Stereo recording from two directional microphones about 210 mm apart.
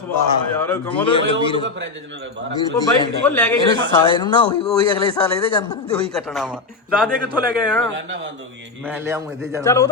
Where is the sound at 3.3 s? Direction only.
10° left (ahead or behind).